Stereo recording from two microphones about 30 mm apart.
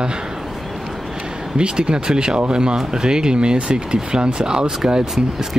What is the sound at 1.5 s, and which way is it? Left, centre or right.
Speech, right.